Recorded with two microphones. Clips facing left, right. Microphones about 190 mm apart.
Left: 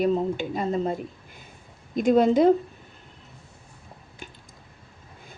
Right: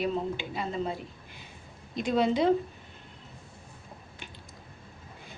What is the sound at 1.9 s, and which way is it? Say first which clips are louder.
Speech: left 7 dB; 50° left (ahead or behind).